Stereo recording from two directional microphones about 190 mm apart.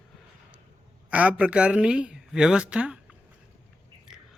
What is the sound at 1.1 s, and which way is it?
Speech, 5° right (ahead or behind).